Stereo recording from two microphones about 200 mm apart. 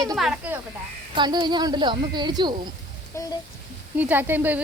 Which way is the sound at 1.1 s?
20° right (ahead or behind).